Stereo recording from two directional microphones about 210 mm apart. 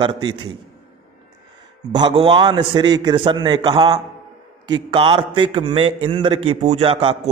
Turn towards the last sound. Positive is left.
turn(degrees=-25)  # may be behind; listen again after turning